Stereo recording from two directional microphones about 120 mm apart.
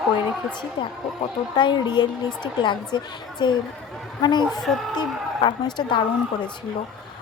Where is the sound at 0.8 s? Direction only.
45° left (ahead or behind).